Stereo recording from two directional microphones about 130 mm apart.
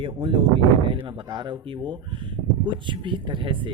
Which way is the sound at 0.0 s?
40° right (ahead or behind).